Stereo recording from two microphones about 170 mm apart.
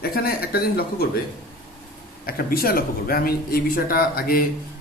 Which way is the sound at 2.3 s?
60° left (ahead or behind).